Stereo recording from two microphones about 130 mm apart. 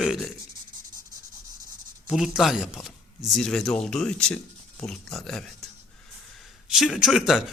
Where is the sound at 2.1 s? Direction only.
5° right (ahead or behind).